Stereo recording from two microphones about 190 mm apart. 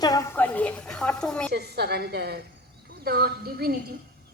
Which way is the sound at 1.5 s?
60° right (ahead or behind).